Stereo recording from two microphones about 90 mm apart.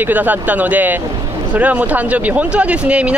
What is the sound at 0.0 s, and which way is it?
Speech, 20° right (ahead or behind).